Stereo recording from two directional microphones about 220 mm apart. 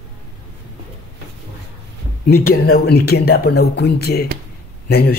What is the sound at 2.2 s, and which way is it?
Speech, 45° left (ahead or behind).